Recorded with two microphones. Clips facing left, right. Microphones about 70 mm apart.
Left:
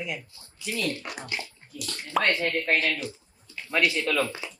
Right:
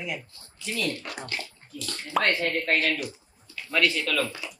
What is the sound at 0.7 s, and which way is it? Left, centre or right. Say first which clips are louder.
Speech: even; left.